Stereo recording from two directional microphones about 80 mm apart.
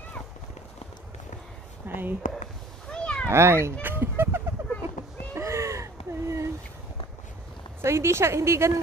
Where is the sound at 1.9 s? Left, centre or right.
Right.